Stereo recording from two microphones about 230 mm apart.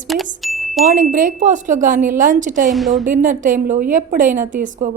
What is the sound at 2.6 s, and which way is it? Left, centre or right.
Speech, centre.